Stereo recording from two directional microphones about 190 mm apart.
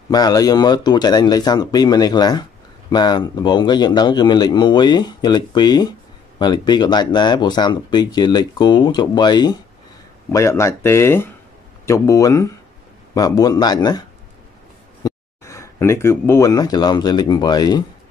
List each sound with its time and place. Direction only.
0.1 s speech: 20° left (ahead or behind)
15.0 s speech: 15° left (ahead or behind)